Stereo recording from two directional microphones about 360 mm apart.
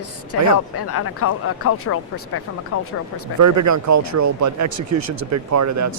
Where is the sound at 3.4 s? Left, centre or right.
Right.